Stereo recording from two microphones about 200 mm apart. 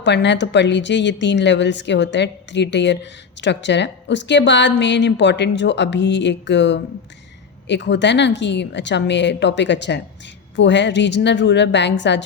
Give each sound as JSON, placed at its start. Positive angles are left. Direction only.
{"t": 0.0, "sound": "a woman's voice", "side_deg": 60}